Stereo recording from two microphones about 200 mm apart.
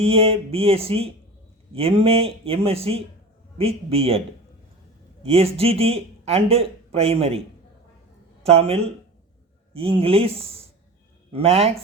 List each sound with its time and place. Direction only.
0.0 s speech: 30° right (ahead or behind)
5.2 s speech: 30° right (ahead or behind)
8.4 s speech: 30° right (ahead or behind)